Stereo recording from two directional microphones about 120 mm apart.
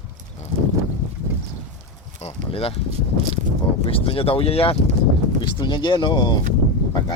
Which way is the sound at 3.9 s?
50° left (ahead or behind).